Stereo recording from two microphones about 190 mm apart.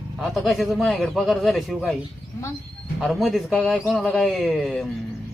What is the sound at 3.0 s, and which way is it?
Speech, centre (ahead or behind).